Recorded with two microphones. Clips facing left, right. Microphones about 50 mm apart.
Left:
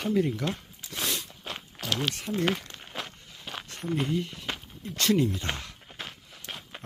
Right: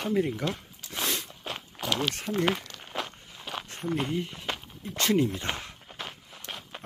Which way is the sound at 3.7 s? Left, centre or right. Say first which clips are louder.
Even; right.